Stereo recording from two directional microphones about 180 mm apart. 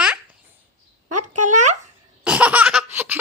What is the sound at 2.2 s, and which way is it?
Laughter, 5° right (ahead or behind).